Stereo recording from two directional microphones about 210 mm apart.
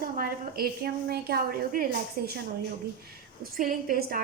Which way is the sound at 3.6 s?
40° right (ahead or behind).